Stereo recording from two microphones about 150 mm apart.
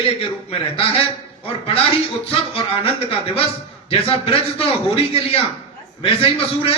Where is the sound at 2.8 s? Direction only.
40° left (ahead or behind).